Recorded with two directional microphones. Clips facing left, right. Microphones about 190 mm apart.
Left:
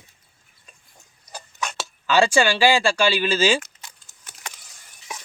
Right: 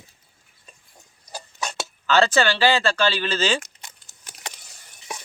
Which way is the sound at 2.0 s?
10° left (ahead or behind).